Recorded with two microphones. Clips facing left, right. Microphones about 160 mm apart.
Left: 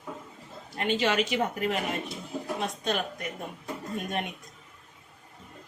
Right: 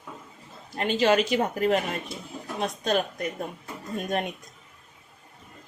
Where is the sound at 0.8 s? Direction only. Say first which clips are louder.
Right 4 dB; 40° right (ahead or behind).